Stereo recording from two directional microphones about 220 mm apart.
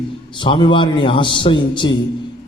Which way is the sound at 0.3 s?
20° left (ahead or behind).